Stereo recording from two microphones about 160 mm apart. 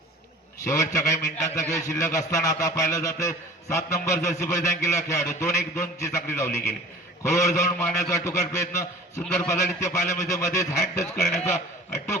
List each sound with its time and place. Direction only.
0.6 s a man's voice: 20° left (ahead or behind)